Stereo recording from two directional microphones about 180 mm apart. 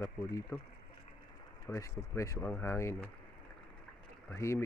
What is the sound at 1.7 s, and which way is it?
Speech, 15° left (ahead or behind).